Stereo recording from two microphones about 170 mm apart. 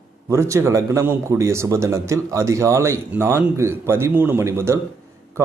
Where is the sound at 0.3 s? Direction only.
15° right (ahead or behind).